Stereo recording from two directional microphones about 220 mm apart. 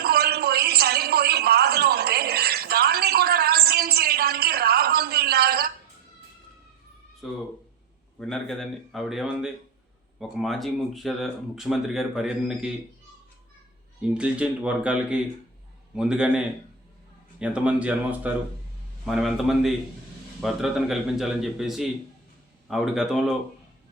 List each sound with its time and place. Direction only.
0.0 s a sound: 45° right (ahead or behind)
8.2 s speech: centre (ahead or behind)
14.0 s speech: 5° right (ahead or behind)
17.4 s speech: 5° right (ahead or behind)